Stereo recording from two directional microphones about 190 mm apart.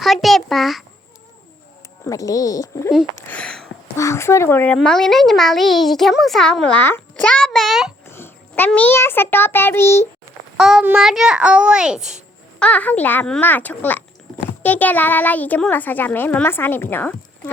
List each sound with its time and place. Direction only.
0.0 s a sound: centre (ahead or behind)
2.0 s a child's voice: 20° left (ahead or behind)
3.2 s a sound: 10° left (ahead or behind)
3.9 s a child's voice: 15° left (ahead or behind); by 7.9 s centre (ahead or behind)
8.0 s a child's voice: 10° left (ahead or behind)
10.6 s a child's voice: 5° right (ahead or behind)